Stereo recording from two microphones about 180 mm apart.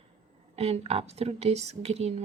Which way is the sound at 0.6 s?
35° right (ahead or behind).